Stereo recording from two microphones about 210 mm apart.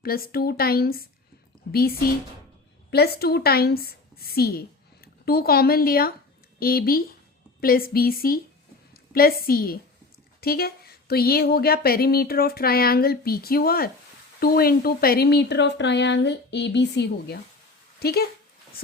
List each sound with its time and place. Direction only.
0.0 s a woman's voice: 45° left (ahead or behind)